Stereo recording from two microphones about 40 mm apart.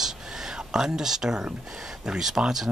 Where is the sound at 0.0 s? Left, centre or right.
Centre.